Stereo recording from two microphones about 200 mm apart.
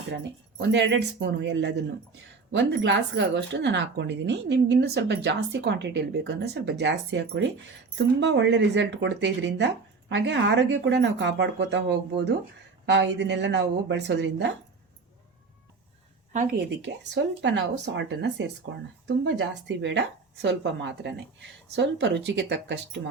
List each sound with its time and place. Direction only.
0.2 s speech: 60° right (ahead or behind)
16.3 s a woman's voice: 45° right (ahead or behind)
17.4 s speech: 60° right (ahead or behind)